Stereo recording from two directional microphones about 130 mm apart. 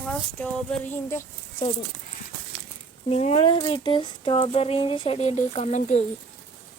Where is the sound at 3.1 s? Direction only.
55° left (ahead or behind).